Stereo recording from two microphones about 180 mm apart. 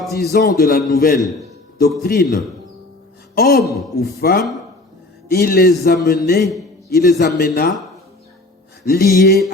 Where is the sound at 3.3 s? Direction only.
55° left (ahead or behind).